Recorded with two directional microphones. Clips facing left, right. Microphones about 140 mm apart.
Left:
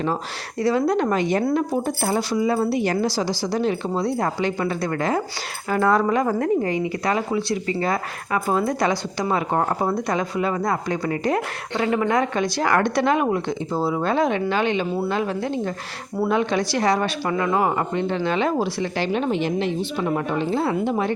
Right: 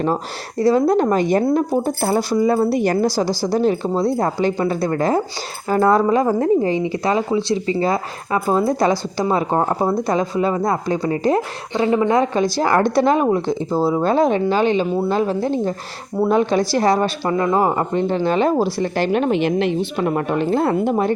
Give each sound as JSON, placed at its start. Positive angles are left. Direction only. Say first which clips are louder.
{"t": 0.6, "sound": "a woman's voice", "louder": "right 5 dB", "side_deg": -40}